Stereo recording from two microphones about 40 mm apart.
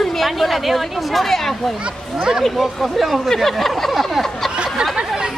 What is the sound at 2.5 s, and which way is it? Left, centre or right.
Speech, centre.